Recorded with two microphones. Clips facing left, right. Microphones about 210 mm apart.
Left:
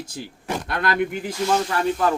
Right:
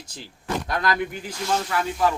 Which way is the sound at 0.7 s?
60° left (ahead or behind).